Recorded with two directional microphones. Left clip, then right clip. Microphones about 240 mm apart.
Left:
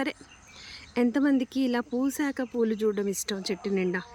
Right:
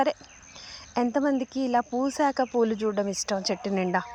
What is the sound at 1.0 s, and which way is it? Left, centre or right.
A woman's voice, left.